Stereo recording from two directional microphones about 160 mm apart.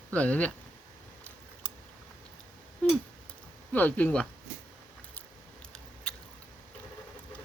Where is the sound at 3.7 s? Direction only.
10° left (ahead or behind).